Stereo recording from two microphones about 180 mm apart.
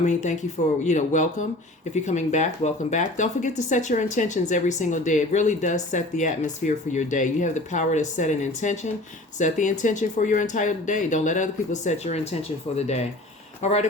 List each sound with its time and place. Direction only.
0.0 s speech: 40° left (ahead or behind)